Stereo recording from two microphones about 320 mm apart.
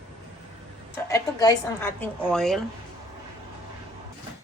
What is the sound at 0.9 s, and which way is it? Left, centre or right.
A woman's voice, centre.